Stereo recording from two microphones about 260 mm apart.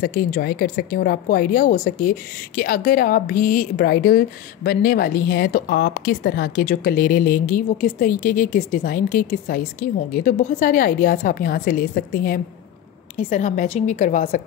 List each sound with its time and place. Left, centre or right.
0.0 s a woman's voice: left